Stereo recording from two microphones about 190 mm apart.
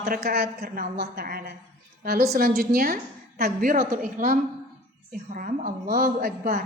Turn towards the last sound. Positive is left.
turn(degrees=-50)  # may be behind; listen again after turning